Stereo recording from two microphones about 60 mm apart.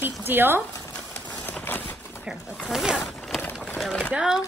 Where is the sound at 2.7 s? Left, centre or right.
Centre.